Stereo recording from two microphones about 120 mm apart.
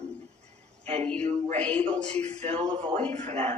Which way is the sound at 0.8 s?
70° right (ahead or behind).